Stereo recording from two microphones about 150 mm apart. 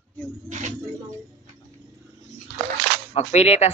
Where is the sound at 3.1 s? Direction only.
45° left (ahead or behind).